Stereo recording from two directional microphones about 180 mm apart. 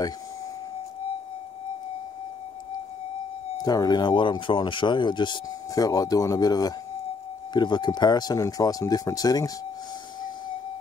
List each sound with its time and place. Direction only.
3.6 s speech: 20° left (ahead or behind)